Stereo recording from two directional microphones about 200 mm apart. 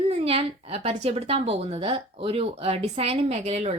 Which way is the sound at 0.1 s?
30° right (ahead or behind).